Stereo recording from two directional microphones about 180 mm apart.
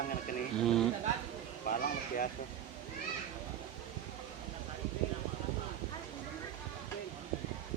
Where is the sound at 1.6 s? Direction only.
50° left (ahead or behind).